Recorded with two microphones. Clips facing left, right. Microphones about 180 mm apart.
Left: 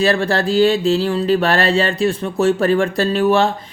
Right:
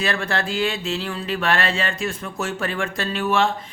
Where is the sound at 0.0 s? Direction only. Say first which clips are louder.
Left 8 dB; 35° left (ahead or behind).